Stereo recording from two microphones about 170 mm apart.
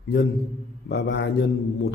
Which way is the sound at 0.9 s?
85° left.